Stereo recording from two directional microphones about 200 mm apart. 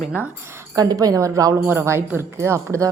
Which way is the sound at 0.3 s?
10° right (ahead or behind).